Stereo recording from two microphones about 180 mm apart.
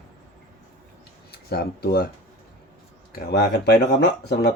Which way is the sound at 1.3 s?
60° left (ahead or behind).